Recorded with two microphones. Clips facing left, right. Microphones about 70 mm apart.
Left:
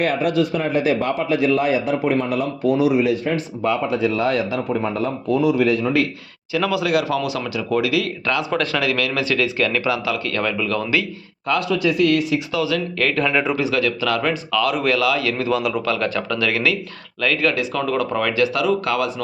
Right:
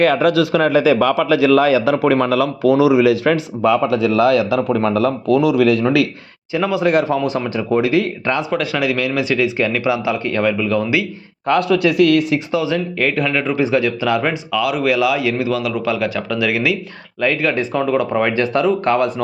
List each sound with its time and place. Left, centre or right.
0.3 s speech: right
6.5 s speech: right
6.8 s speech: right
8.4 s a man's voice: centre
11.4 s speech: right
12.5 s speech: right
13.2 s speech: centre
13.6 s a man's voice: right
15.4 s a man's voice: centre; by 19.1 s right